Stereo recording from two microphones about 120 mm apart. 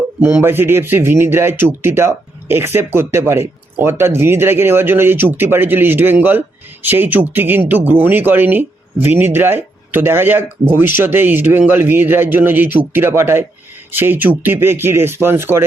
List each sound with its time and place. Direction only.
0.4 s speech: 20° right (ahead or behind)